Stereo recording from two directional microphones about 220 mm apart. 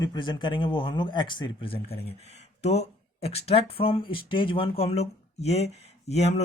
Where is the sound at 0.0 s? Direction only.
20° left (ahead or behind).